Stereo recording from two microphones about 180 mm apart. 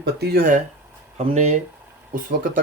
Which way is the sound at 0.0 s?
65° right (ahead or behind).